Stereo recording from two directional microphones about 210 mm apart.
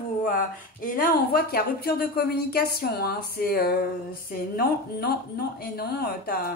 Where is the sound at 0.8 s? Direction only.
45° left (ahead or behind).